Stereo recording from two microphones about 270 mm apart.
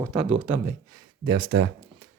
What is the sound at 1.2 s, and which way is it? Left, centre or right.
Speech, centre.